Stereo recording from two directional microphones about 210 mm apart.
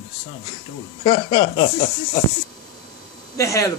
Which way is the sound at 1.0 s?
20° left (ahead or behind).